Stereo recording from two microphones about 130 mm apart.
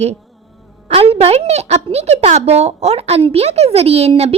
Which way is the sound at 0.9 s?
50° right (ahead or behind).